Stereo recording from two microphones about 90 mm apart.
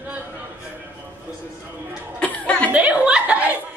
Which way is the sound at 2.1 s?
15° left (ahead or behind).